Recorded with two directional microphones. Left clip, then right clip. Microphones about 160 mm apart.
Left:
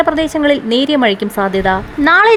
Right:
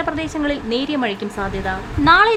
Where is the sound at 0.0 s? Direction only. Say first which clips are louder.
Left 9 dB; 40° left (ahead or behind).